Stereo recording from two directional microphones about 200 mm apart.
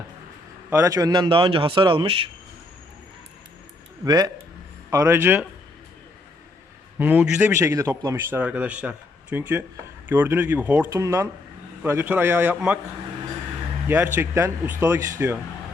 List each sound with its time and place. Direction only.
0.7 s speech: 15° right (ahead or behind)
4.0 s speech: 20° right (ahead or behind)
7.0 s speech: 10° right (ahead or behind)
13.8 s speech: 10° right (ahead or behind)